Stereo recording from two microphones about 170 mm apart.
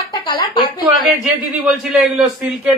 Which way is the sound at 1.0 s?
Centre (ahead or behind).